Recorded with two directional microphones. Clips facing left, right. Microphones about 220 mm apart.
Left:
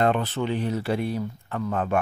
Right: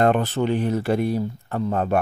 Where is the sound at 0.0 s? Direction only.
45° right (ahead or behind).